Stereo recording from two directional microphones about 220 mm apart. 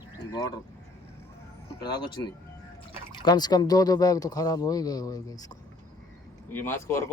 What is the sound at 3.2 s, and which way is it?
A man's voice, 20° left (ahead or behind).